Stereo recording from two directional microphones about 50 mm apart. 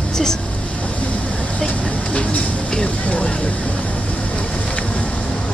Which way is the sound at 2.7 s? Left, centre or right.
Left.